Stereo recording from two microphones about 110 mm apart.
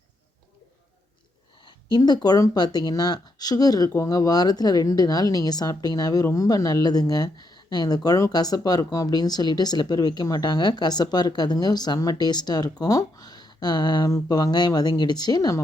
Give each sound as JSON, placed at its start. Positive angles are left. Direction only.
{"t": 1.6, "sound": "speech", "side_deg": 40}